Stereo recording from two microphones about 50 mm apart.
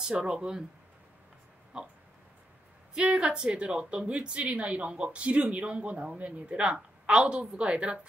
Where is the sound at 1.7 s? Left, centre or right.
Centre.